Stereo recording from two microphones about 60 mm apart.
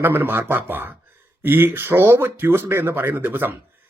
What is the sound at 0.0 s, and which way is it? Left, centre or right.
Speech, right.